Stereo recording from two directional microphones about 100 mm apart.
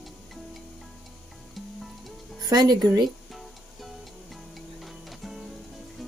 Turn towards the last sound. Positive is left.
turn(degrees=0)  # may be behind; listen again after turning